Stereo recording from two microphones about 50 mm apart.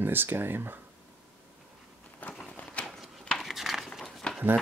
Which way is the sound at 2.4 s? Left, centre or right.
Left.